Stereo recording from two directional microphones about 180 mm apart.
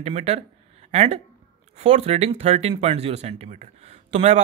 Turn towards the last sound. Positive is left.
turn(degrees=-40)  # may be behind; listen again after turning